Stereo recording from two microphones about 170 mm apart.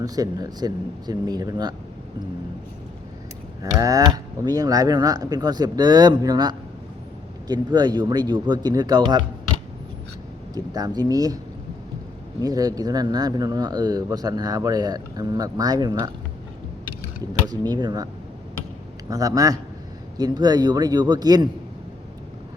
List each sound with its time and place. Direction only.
0.0 s speech: 20° right (ahead or behind)
3.6 s speech: 20° right (ahead or behind)
10.5 s speech: 20° right (ahead or behind)
12.4 s speech: 20° right (ahead or behind)
17.4 s speech: 20° right (ahead or behind)